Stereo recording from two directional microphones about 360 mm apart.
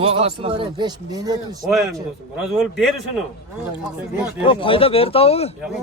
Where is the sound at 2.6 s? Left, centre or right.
Centre.